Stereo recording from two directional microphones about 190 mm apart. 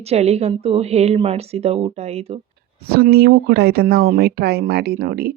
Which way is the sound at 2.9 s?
55° right (ahead or behind).